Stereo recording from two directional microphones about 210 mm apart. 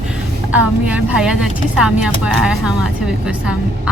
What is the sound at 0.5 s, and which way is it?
Speech, 5° right (ahead or behind).